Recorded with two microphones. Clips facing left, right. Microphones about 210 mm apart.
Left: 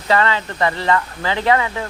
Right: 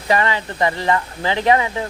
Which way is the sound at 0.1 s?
15° right (ahead or behind).